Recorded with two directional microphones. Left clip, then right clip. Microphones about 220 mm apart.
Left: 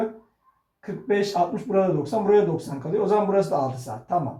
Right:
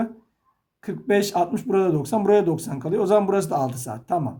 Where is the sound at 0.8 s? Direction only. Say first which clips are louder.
Right 2 dB; 45° right (ahead or behind).